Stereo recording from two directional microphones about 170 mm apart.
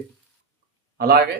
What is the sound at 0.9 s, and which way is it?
Speech, 65° right (ahead or behind).